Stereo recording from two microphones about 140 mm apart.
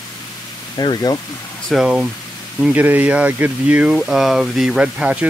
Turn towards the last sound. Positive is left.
turn(degrees=-10)  # may be behind; listen again after turning